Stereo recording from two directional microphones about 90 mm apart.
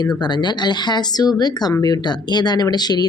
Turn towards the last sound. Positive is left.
turn(degrees=50)  # may be behind; listen again after turning